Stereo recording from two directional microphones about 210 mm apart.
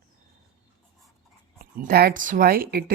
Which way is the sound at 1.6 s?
45° right (ahead or behind).